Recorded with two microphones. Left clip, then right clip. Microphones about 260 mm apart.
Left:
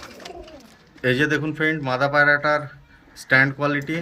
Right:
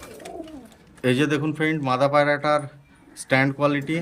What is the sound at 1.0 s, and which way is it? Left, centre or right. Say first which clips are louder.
Speech: left 2 dB; centre.